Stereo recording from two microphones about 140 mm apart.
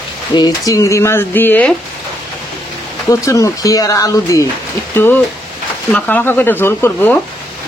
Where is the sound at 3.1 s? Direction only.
25° left (ahead or behind).